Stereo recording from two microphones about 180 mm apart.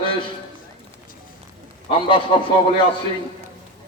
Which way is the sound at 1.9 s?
30° left (ahead or behind).